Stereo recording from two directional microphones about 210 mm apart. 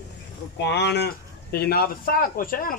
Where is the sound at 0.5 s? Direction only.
55° left (ahead or behind).